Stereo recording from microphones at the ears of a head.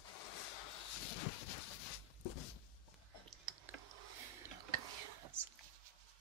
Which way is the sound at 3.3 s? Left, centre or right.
Right.